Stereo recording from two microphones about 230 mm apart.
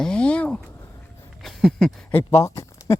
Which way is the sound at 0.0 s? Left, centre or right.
Centre.